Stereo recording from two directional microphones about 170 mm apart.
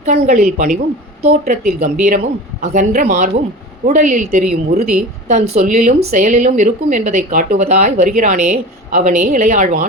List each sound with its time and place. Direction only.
0.0 s a woman's voice: 40° right (ahead or behind)